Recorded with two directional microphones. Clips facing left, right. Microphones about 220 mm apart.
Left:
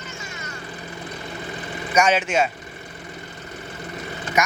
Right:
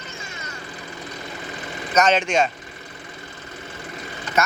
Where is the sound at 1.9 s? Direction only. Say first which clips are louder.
Right 1 dB; 10° left (ahead or behind).